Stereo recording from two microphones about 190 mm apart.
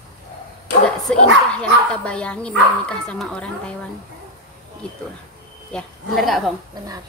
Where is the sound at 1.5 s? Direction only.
5° left (ahead or behind).